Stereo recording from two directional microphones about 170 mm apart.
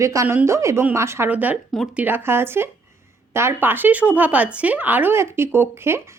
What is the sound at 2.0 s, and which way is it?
Speech, 10° right (ahead or behind).